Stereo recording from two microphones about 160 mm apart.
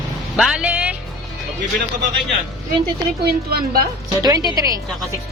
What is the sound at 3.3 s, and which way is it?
Speech, 70° right (ahead or behind).